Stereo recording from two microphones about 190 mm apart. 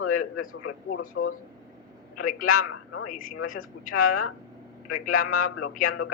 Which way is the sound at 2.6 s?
90° left.